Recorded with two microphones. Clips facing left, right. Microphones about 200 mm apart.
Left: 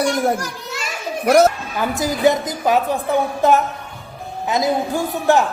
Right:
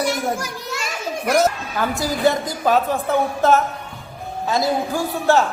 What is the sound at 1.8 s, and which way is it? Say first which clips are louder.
A man's voice: left 2 dB; 20° left (ahead or behind).